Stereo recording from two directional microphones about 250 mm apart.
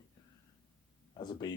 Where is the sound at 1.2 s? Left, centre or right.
Centre.